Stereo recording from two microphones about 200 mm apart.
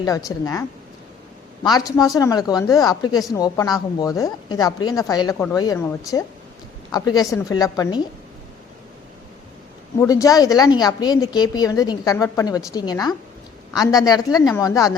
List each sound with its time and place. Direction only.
0.3 s speech: 15° left (ahead or behind)
1.6 s a woman's voice: 20° left (ahead or behind)
10.0 s a woman's voice: 15° left (ahead or behind)